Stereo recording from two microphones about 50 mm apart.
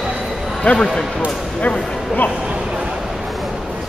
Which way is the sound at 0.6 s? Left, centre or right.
Left.